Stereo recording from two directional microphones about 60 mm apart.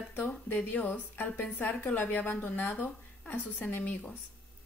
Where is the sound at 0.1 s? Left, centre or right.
Left.